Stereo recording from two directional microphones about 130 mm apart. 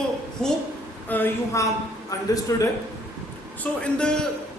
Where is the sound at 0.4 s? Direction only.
5° left (ahead or behind); by 2.4 s 25° left (ahead or behind).